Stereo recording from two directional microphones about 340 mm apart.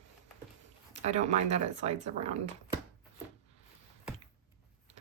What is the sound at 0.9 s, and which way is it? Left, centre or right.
Speech, centre.